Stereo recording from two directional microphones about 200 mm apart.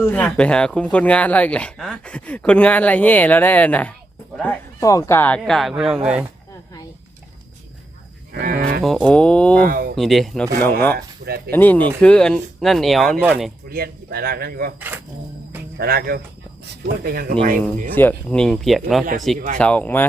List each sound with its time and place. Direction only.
0.0 s speech: 5° left (ahead or behind)
8.3 s livestock: 50° right (ahead or behind)
8.8 s speech: 5° left (ahead or behind)
9.6 s a man's voice: 45° right (ahead or behind)
9.9 s speech: centre (ahead or behind)
10.9 s speech: 50° right (ahead or behind)
11.5 s speech: 10° left (ahead or behind)
13.7 s a man's voice: 50° right (ahead or behind)
15.8 s a man's voice: 45° right (ahead or behind)
17.9 s speech: 5° left (ahead or behind)